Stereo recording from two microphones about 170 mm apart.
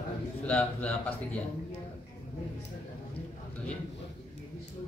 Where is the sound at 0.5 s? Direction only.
10° left (ahead or behind).